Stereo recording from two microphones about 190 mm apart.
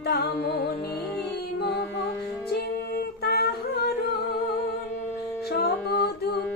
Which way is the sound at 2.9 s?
55° left (ahead or behind).